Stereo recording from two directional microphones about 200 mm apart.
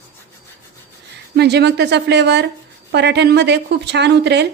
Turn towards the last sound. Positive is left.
turn(degrees=-60)  # may be behind; listen again after turning